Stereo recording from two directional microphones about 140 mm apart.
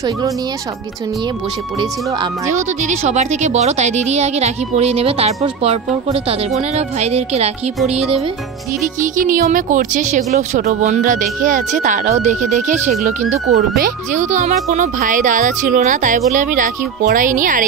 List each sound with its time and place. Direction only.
2.5 s speech: 55° right (ahead or behind)
9.0 s speech: 70° right (ahead or behind); by 13.6 s 55° right (ahead or behind)
13.6 s speech: 85° right; by 17.6 s 70° right (ahead or behind)